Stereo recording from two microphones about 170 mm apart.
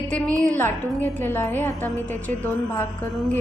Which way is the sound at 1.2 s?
15° left (ahead or behind).